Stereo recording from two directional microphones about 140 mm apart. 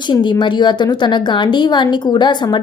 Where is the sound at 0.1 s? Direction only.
35° left (ahead or behind).